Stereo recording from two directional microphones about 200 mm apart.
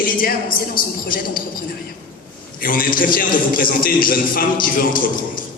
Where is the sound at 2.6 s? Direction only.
45° left (ahead or behind).